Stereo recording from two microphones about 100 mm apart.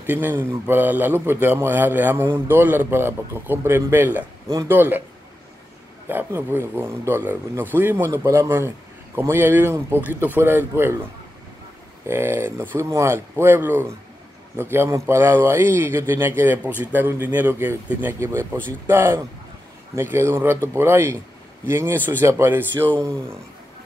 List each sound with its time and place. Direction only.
0.0 s speech: 20° right (ahead or behind)
6.0 s speech: 20° right (ahead or behind)
12.1 s speech: 25° right (ahead or behind)